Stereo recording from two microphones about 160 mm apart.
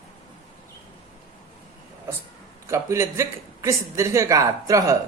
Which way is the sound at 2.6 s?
15° right (ahead or behind).